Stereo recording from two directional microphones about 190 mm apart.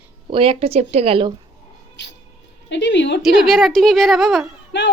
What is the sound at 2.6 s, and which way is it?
Speech, 70° left (ahead or behind).